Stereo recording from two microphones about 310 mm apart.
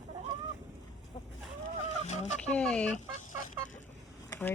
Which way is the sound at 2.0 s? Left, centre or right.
Left.